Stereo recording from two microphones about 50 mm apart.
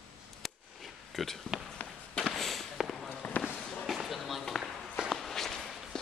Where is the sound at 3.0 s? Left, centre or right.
Left.